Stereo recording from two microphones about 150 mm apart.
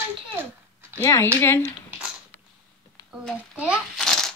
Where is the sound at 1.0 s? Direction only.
15° left (ahead or behind).